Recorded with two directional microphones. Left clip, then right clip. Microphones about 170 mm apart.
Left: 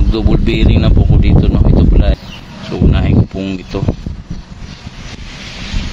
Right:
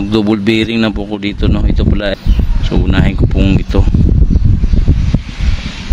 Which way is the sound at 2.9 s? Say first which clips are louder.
Right 1 dB; 50° right (ahead or behind).